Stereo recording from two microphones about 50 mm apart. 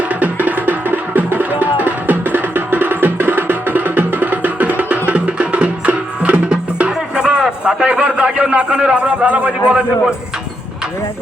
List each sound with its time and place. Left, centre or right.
0.2 s music: right